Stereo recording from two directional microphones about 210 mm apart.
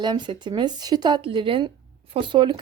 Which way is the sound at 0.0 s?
20° right (ahead or behind).